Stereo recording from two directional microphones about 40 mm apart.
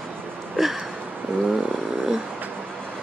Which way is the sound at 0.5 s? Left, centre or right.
Centre.